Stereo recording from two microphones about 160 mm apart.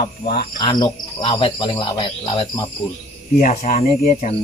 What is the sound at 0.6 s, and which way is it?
Cricket, 25° left (ahead or behind).